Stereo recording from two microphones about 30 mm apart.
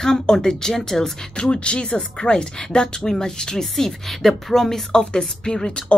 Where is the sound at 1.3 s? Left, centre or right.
Left; by 4.8 s centre.